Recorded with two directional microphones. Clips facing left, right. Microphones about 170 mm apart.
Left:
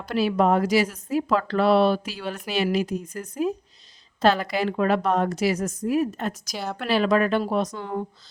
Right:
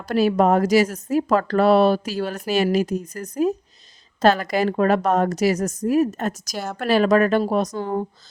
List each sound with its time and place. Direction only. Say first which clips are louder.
0.0 s speech: right 4 dB; 45° right (ahead or behind)